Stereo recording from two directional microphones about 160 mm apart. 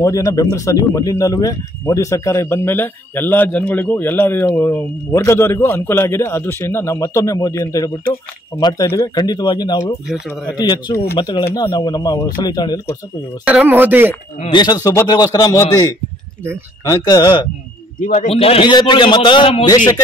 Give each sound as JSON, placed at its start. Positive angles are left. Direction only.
{"t": 0.0, "sound": "a man's voice", "side_deg": 20}
{"t": 13.5, "sound": "speech", "side_deg": -10}
{"t": 14.5, "sound": "a man's voice", "side_deg": 25}
{"t": 18.0, "sound": "a man's voice", "side_deg": 45}